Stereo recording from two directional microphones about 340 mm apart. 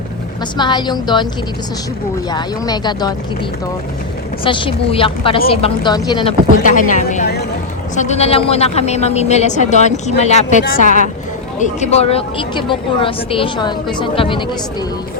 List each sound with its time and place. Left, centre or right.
0.5 s a woman's voice: centre
2.3 s a woman's voice: centre
4.4 s a woman's voice: centre